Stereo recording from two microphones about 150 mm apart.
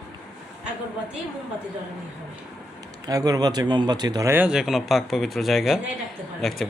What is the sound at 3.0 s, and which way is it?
Speech, 25° right (ahead or behind).